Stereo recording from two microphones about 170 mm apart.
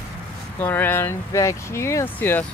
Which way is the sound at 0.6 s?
10° left (ahead or behind).